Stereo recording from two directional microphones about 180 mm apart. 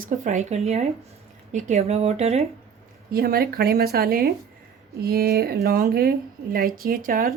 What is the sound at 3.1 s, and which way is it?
Speech, 60° right (ahead or behind).